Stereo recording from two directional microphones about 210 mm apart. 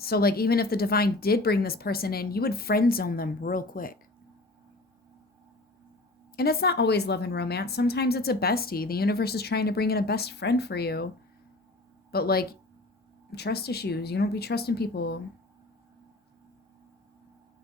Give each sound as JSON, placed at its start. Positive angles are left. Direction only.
{"t": 0.0, "sound": "a woman's voice", "side_deg": 45}
{"t": 6.3, "sound": "a woman's voice", "side_deg": 45}
{"t": 12.1, "sound": "a woman's voice", "side_deg": 45}